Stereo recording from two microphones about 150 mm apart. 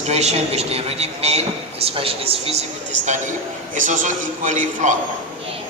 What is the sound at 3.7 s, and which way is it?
A man's voice, 60° right (ahead or behind).